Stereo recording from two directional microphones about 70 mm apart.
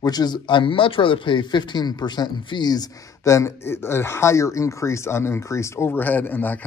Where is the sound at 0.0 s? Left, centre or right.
Left.